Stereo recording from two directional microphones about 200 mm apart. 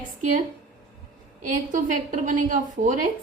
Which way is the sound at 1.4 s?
40° right (ahead or behind).